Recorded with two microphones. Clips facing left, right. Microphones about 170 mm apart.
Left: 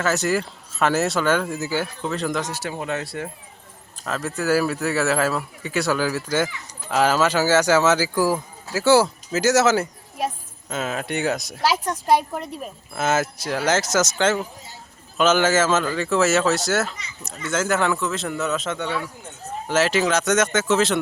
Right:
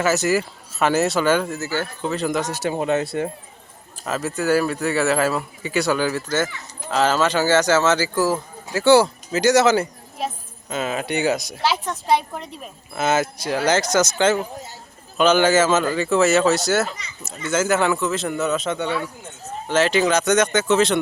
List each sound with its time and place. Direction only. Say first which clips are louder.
0.0 s a man's voice: right 2 dB; centre (ahead or behind)
1.5 s speech: even; 15° left (ahead or behind)
2.0 s a man's voice: right 2 dB; centre (ahead or behind)
2.5 s speech: right 6 dB; 20° right (ahead or behind)
4.0 s a man's voice: right 2 dB; 5° right (ahead or behind)